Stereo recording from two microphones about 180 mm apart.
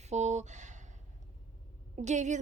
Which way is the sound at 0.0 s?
40° right (ahead or behind).